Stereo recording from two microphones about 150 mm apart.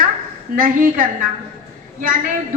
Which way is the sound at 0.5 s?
65° right (ahead or behind).